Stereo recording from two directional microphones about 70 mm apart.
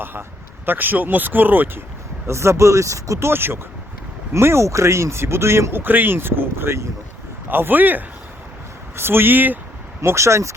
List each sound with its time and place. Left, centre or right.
0.0 s speech: right
2.2 s speech: right
5.8 s speech: right
10.0 s speech: right